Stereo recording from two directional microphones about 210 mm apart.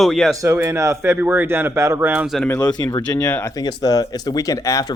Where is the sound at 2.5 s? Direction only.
20° left (ahead or behind).